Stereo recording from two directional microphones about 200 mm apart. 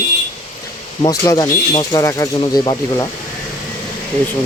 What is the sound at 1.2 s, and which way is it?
Speech, 20° left (ahead or behind).